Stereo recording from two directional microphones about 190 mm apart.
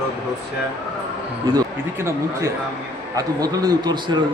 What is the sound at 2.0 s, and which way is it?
A man's voice, 15° right (ahead or behind).